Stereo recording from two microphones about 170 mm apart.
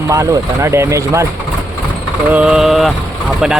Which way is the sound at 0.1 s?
15° right (ahead or behind).